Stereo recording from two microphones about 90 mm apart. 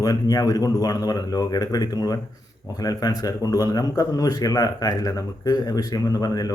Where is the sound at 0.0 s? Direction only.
45° left (ahead or behind).